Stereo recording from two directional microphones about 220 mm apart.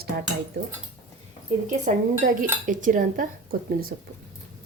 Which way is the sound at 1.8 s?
40° right (ahead or behind).